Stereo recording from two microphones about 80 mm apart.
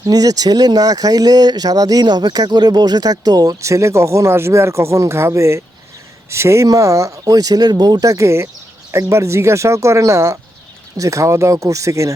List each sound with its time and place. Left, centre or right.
0.0 s speech: right
2.0 s speech: right
3.6 s speech: right